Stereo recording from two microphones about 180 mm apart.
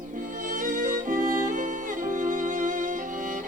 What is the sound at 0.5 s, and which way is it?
Music, 50° right (ahead or behind).